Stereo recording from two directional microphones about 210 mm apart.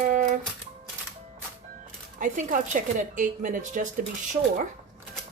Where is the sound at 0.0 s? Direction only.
40° right (ahead or behind).